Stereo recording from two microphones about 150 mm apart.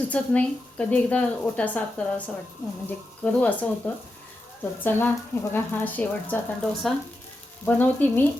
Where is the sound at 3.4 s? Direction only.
10° left (ahead or behind).